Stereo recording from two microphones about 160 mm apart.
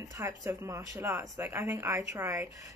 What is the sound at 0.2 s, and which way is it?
Speech, 20° right (ahead or behind).